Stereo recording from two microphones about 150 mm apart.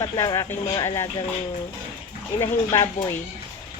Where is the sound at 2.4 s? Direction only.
20° left (ahead or behind).